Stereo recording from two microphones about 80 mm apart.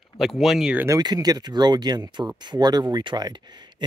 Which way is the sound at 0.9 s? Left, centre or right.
Right.